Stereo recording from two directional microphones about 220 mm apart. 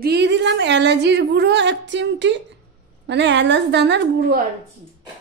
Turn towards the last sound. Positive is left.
turn(degrees=-45)  # may be behind; listen again after turning